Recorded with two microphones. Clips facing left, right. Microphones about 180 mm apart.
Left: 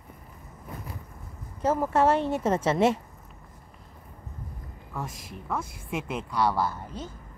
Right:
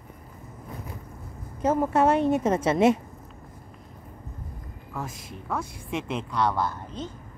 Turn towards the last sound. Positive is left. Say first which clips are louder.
# right 1 dB
turn(degrees=5)  # may be behind; listen again after turning